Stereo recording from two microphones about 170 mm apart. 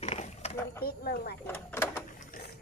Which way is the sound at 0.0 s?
40° left (ahead or behind).